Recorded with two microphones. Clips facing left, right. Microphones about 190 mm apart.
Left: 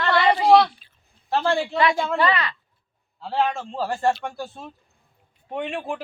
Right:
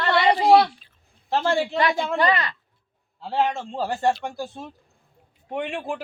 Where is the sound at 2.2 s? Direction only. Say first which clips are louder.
Right 1 dB; 40° right (ahead or behind).